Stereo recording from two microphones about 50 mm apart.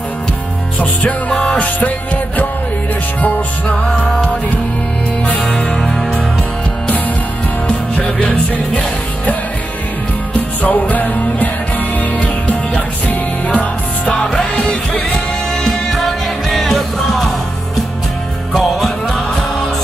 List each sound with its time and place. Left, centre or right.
0.7 s music: left
5.2 s music: left
5.5 s music: centre
7.6 s music: centre
10.3 s music: left
14.1 s music: centre
18.5 s music: centre